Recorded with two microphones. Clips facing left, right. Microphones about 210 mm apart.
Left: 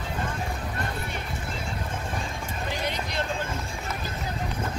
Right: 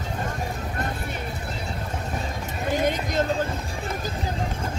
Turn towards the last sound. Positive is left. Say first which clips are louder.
# right 7 dB
turn(degrees=-45)  # may be behind; listen again after turning